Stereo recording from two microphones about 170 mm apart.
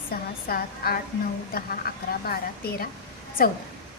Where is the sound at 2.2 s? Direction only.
60° left (ahead or behind).